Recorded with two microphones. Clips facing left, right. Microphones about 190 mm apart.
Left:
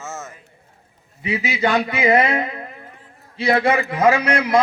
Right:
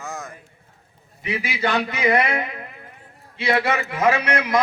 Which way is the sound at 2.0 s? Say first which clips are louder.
Left 3 dB; 25° left (ahead or behind).